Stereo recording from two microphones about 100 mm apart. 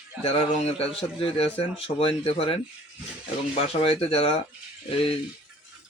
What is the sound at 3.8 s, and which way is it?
Speech, 70° left (ahead or behind).